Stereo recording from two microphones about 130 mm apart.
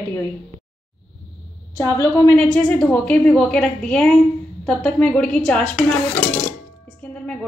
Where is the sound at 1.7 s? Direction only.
20° left (ahead or behind).